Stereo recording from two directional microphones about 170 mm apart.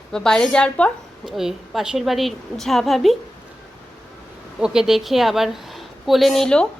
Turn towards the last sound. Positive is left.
turn(degrees=5)  # may be behind; listen again after turning